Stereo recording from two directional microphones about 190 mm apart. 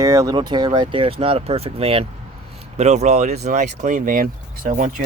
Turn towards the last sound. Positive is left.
turn(degrees=-45)  # may be behind; listen again after turning